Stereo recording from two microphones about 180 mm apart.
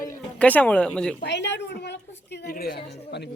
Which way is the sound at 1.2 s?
75° left (ahead or behind).